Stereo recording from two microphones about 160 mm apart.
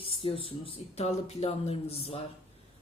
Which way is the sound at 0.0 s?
35° left (ahead or behind).